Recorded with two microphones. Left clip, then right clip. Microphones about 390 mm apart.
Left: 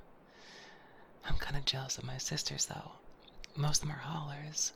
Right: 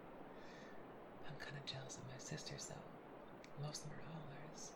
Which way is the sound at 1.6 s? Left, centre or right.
Left.